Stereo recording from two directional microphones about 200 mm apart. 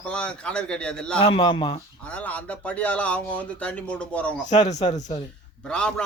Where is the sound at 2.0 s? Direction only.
5° left (ahead or behind).